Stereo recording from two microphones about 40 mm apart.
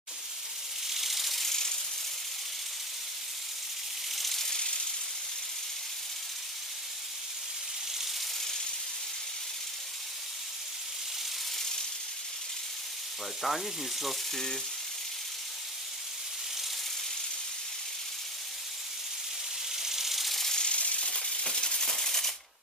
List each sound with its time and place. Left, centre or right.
0.8 s ratchet: centre
4.1 s ratchet: centre
13.4 s speech: centre
19.7 s ratchet: centre
20.4 s a sound: centre
20.7 s a sound: left
21.8 s maraca: centre